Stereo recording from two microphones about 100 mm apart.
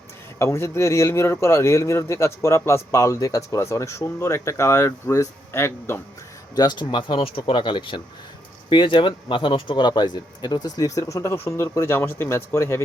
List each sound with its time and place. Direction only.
0.3 s speech: 25° left (ahead or behind)
6.6 s speech: 50° left (ahead or behind); by 12.8 s 25° left (ahead or behind)